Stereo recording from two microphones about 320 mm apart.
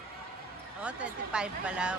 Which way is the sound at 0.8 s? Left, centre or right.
Centre.